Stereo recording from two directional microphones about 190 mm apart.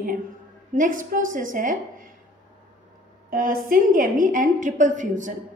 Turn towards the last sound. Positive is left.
turn(degrees=-40)  # may be behind; listen again after turning